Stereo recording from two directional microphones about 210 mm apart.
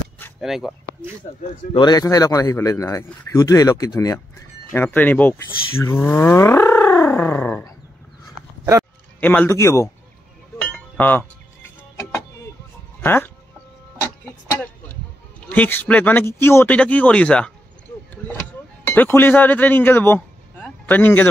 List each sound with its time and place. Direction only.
0.4 s speech: centre (ahead or behind)
1.7 s a man's voice: 20° left (ahead or behind)
5.8 s whale vocalization: 10° left (ahead or behind)
9.2 s a man's voice: 10° left (ahead or behind)
10.6 s chink: 10° left (ahead or behind)
13.0 s speech: 10° left (ahead or behind)
15.4 s a man's voice: 5° left (ahead or behind)
18.1 s vehicle: 10° left (ahead or behind)
18.9 s speech: 10° left (ahead or behind)